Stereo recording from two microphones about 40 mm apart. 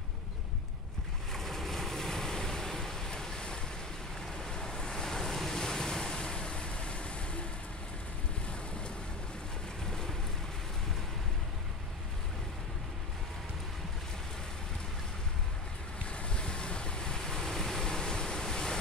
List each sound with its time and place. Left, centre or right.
1.3 s waves: centre; by 7.4 s left
9.8 s vehicle: centre
16.1 s waves: left